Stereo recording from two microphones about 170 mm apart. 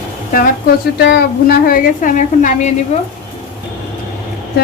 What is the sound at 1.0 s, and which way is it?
A woman's voice, 75° left (ahead or behind).